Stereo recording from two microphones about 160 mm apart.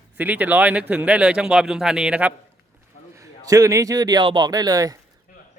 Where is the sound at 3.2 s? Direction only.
20° right (ahead or behind).